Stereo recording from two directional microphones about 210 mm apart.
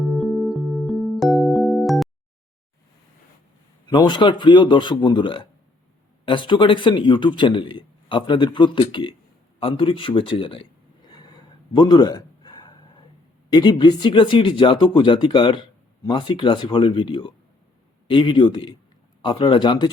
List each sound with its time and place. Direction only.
0.1 s music: centre (ahead or behind)
3.8 s a man's voice: 20° left (ahead or behind)
9.6 s a sound: 25° left (ahead or behind)
13.5 s a man's voice: 20° left (ahead or behind)